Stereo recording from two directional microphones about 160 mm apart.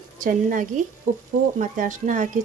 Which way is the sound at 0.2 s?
55° right (ahead or behind).